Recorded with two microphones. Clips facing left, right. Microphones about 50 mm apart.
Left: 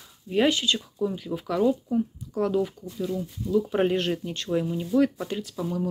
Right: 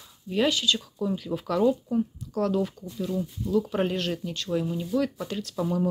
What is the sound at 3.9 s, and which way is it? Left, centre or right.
Speech, left.